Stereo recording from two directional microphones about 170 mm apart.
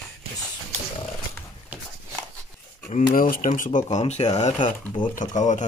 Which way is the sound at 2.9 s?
50° left (ahead or behind).